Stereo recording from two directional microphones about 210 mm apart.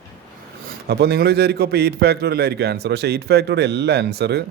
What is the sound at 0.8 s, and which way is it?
A man's voice, 50° right (ahead or behind).